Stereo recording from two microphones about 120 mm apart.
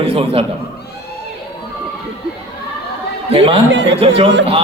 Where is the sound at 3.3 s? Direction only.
50° right (ahead or behind).